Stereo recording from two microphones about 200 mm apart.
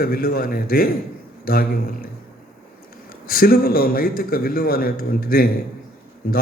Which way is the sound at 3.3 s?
45° left (ahead or behind).